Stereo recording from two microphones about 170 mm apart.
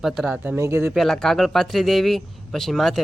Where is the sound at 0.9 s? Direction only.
Centre (ahead or behind).